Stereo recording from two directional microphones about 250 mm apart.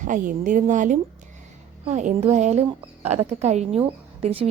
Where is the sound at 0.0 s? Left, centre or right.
Right.